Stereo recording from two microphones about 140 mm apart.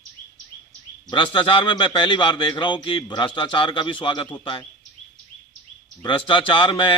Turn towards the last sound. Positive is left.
turn(degrees=35)  # may be behind; listen again after turning